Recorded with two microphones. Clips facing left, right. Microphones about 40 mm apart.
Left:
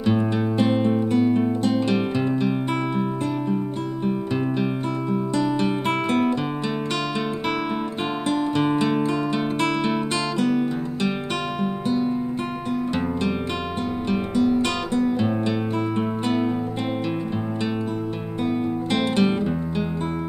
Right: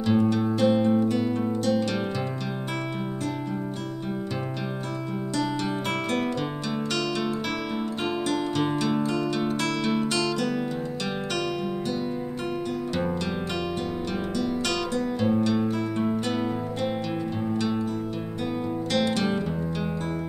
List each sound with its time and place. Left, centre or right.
0.2 s music: left
5.1 s music: left
8.3 s music: left
14.0 s music: left
15.3 s music: left
18.4 s music: left